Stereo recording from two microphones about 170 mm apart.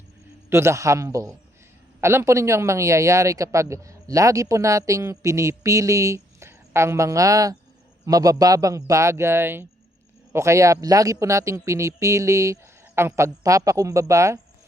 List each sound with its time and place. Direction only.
0.5 s a man's voice: 15° right (ahead or behind)